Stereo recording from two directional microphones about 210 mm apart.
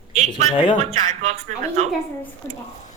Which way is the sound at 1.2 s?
30° right (ahead or behind).